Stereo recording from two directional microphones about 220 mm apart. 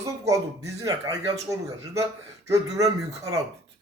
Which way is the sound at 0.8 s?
15° right (ahead or behind).